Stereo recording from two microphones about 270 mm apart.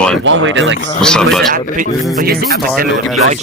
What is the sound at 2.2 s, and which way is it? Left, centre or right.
Speech, right.